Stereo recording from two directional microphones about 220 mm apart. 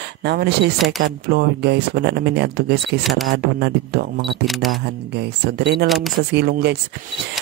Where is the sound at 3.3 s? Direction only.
50° right (ahead or behind).